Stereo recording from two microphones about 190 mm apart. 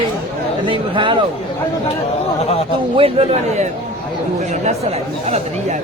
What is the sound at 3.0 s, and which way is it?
Speech, 30° right (ahead or behind).